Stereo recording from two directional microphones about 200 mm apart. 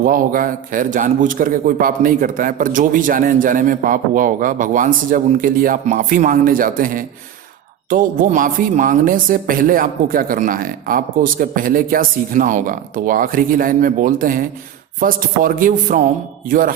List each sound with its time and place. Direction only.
0.0 s a man's voice: 45° right (ahead or behind)